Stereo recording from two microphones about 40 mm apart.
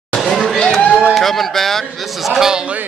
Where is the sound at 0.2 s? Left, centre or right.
Centre.